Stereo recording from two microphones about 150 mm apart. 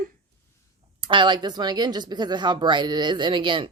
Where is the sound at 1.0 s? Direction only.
35° right (ahead or behind).